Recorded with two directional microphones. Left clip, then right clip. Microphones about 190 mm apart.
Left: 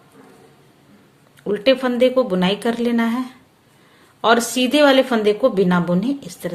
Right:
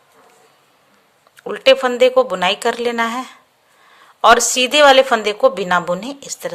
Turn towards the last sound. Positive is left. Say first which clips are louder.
# left 1 dB
turn(degrees=-40)  # may be behind; listen again after turning